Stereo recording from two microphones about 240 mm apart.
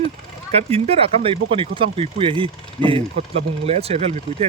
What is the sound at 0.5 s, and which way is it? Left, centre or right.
Speech, right.